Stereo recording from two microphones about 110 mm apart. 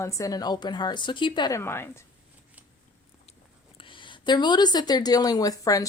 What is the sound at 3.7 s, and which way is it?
A woman's voice, 50° left (ahead or behind).